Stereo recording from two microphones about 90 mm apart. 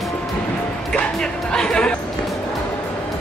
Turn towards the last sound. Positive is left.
turn(degrees=10)  # may be behind; listen again after turning